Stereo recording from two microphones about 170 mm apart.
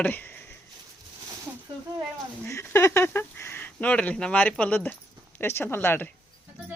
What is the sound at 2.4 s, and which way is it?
Speech, 15° left (ahead or behind).